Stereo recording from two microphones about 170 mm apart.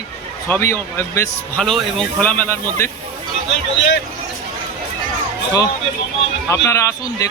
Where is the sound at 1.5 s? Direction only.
Centre (ahead or behind).